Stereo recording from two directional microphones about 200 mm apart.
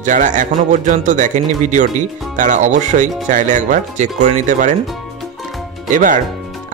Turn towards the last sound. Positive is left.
turn(degrees=-40)  # may be behind; listen again after turning